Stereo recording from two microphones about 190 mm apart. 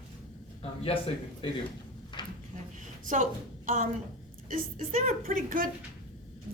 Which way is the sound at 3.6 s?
45° right (ahead or behind).